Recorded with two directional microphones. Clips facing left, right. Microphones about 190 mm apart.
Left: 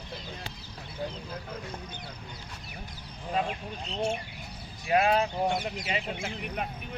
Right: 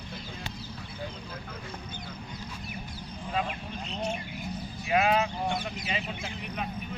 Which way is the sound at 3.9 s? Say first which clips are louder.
Left 3 dB; 30° left (ahead or behind).